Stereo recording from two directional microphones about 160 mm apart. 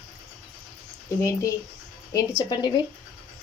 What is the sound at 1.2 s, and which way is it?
A woman's voice, 20° left (ahead or behind).